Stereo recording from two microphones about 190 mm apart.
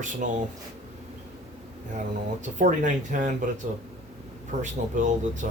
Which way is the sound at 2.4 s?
40° right (ahead or behind).